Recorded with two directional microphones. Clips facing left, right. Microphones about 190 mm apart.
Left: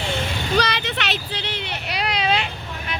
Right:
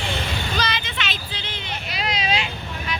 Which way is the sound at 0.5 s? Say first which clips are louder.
Left 9 dB; 65° left (ahead or behind).